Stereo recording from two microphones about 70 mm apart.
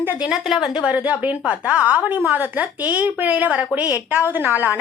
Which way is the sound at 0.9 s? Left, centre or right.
Right.